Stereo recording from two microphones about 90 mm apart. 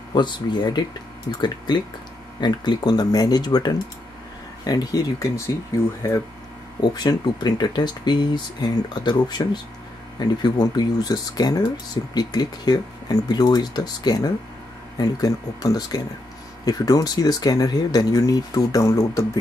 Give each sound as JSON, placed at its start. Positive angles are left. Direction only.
{"t": 0.1, "sound": "speech", "side_deg": 55}
{"t": 6.8, "sound": "speech", "side_deg": 50}